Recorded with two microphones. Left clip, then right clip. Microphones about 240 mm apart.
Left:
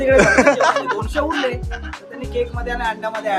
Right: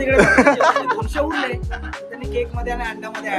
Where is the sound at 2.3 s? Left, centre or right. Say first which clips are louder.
Left 1 dB; centre.